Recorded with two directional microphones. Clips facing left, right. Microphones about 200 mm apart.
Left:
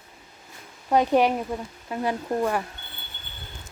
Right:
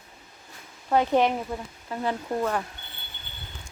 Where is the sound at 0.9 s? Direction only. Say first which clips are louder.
Left 2 dB; 15° left (ahead or behind).